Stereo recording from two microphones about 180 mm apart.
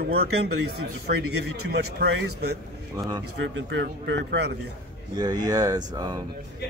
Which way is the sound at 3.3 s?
90° right.